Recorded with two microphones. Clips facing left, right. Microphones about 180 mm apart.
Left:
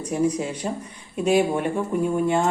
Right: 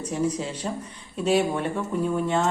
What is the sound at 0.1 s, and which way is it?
A woman's voice, 10° left (ahead or behind).